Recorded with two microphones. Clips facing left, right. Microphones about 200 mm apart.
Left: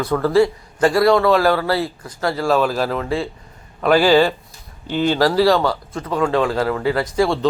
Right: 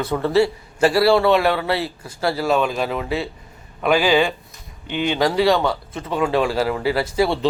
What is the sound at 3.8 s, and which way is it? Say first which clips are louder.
A man's voice: left 3 dB; 10° right (ahead or behind).